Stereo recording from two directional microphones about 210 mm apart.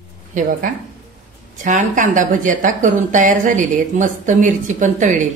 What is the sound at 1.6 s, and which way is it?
A woman's voice, 40° right (ahead or behind).